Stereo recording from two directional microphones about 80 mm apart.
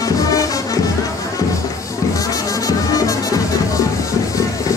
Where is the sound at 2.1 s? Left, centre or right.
Left.